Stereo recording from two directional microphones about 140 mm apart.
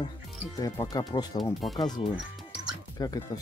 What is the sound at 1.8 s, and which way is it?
Speech, 30° left (ahead or behind).